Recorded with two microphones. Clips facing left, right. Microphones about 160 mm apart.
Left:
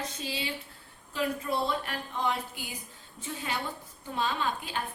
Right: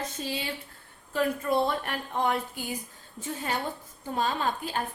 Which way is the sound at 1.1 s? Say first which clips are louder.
Right 5 dB; 50° right (ahead or behind).